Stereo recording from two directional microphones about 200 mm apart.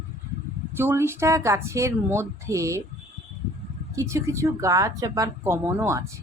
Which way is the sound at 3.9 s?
15° right (ahead or behind).